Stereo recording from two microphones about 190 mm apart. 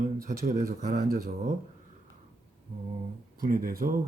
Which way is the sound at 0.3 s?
45° right (ahead or behind).